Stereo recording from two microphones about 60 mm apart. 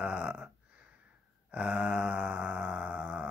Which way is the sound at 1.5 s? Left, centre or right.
Right.